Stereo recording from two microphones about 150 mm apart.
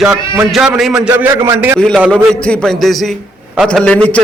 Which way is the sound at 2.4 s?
5° left (ahead or behind).